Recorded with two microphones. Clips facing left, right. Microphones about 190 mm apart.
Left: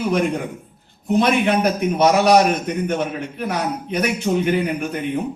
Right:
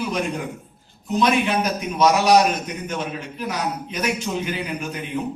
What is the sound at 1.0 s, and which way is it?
A man's voice, 60° left (ahead or behind).